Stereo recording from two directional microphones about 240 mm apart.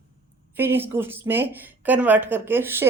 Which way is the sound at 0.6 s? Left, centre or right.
Centre.